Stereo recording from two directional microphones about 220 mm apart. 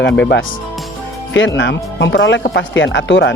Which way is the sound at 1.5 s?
55° left (ahead or behind).